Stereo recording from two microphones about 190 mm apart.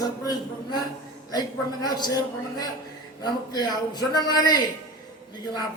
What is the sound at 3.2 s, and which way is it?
A man's voice, 20° left (ahead or behind).